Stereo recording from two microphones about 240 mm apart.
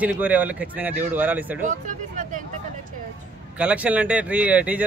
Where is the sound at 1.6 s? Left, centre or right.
Right.